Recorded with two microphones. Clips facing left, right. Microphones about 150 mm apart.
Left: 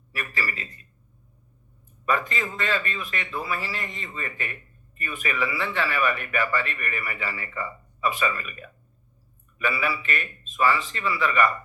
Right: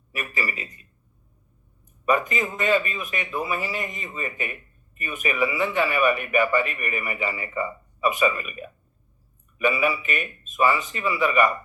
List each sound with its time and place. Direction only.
0.1 s a man's voice: 15° right (ahead or behind)
2.0 s a man's voice: 15° right (ahead or behind)